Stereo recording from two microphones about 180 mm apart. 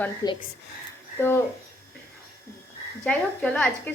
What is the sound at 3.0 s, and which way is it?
Speech, 5° left (ahead or behind).